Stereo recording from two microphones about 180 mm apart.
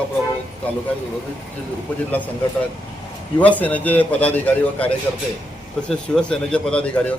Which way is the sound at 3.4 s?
10° left (ahead or behind).